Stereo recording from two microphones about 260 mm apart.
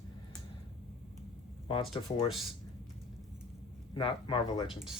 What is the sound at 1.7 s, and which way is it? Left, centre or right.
Speech, centre.